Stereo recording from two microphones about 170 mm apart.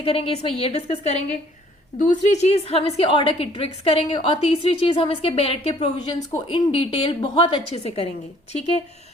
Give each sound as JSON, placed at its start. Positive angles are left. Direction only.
{"t": 0.0, "sound": "a woman's voice", "side_deg": 35}